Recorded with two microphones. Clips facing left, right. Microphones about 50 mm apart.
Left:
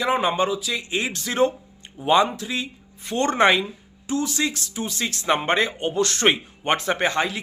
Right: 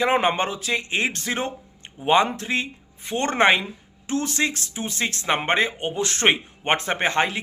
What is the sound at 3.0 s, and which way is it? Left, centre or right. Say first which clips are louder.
Speech: left 1 dB; right.